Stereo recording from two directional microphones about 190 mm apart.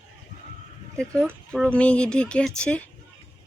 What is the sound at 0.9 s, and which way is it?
Speech, 5° left (ahead or behind).